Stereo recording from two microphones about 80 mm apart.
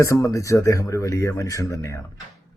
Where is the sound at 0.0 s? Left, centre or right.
Left.